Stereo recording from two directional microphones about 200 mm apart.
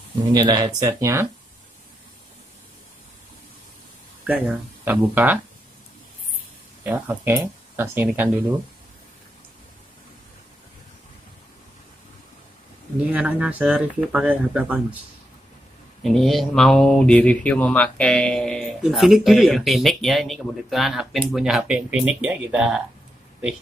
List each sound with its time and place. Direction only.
0.3 s speech: 20° right (ahead or behind)
4.3 s speech: 10° right (ahead or behind)
6.8 s speech: 10° right (ahead or behind)
13.1 s speech: 5° right (ahead or behind)
16.0 s speech: centre (ahead or behind)